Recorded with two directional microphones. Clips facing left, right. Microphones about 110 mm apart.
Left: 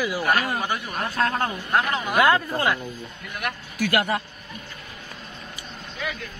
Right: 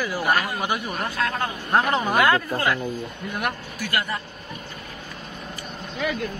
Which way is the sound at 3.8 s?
70° left (ahead or behind).